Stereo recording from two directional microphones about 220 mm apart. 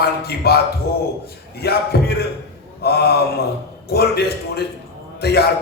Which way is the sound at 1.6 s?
45° left (ahead or behind).